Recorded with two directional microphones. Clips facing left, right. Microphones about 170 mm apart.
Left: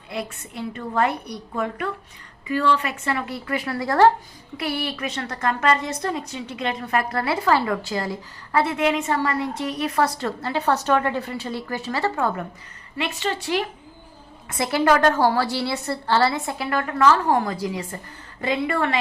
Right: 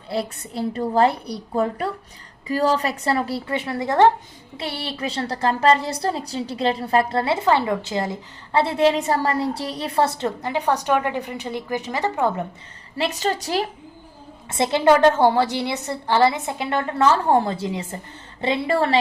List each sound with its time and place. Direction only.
0.1 s a woman's voice: 35° right (ahead or behind)
13.0 s a woman's voice: 40° right (ahead or behind)
14.5 s a woman's voice: 25° right (ahead or behind)